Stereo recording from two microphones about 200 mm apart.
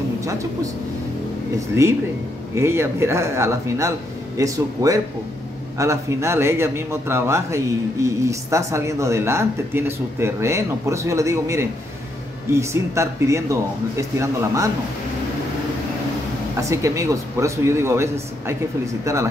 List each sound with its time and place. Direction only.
0.2 s a sound: 15° right (ahead or behind)
1.8 s a man's voice: 15° right (ahead or behind)
16.5 s a man's voice: 15° right (ahead or behind)